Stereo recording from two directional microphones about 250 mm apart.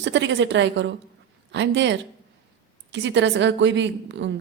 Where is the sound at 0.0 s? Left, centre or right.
Right.